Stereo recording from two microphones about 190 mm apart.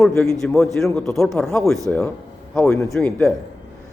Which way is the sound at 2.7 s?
15° left (ahead or behind).